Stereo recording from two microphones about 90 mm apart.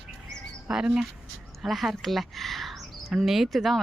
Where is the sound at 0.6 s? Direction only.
5° right (ahead or behind).